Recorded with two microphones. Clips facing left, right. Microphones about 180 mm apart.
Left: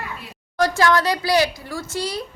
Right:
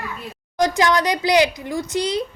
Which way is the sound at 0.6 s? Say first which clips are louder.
Even; 15° right (ahead or behind).